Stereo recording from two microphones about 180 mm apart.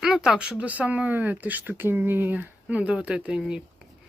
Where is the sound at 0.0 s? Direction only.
Centre (ahead or behind).